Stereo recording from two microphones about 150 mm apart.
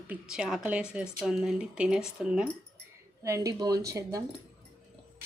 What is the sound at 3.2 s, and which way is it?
Speech, 20° right (ahead or behind).